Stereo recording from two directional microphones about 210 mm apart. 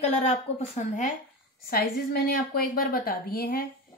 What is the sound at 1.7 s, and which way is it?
A woman's voice, 45° left (ahead or behind).